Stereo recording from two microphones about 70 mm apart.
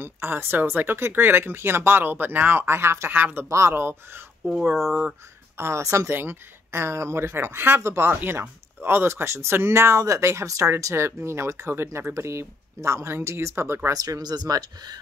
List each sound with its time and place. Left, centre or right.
0.0 s speech: right
3.1 s speech: right
3.4 s speech: right
3.7 s speech: right
6.1 s speech: right
13.9 s speech: right